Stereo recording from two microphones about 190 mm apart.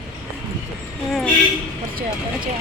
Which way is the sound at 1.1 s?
Centre (ahead or behind).